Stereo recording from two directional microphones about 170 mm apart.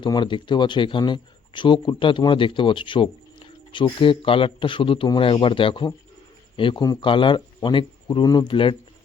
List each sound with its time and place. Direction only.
0.0 s speech: 30° left (ahead or behind)